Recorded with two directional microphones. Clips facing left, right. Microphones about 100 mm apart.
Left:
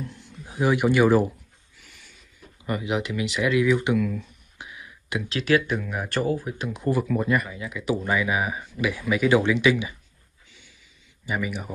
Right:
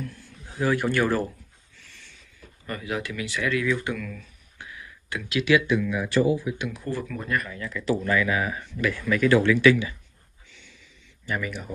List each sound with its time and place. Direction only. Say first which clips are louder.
0.0 s a man's voice: even; 20° left (ahead or behind)
1.8 s a sound: even; 10° left (ahead or behind)
5.3 s speech: right 2 dB; 40° left (ahead or behind)
6.7 s speech: left 6 dB; 20° left (ahead or behind)
7.0 s speech: left 6 dB; 10° left (ahead or behind)
11.2 s speech: left 2 dB; 10° left (ahead or behind)